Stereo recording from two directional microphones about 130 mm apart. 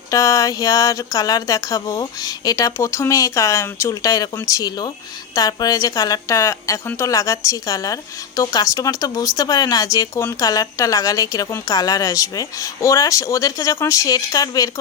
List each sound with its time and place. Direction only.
0.1 s a woman's voice: 25° left (ahead or behind)